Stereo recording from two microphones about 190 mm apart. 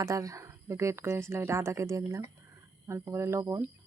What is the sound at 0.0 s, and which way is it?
Speech, 20° right (ahead or behind).